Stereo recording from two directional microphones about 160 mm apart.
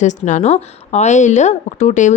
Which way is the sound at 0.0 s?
50° left (ahead or behind).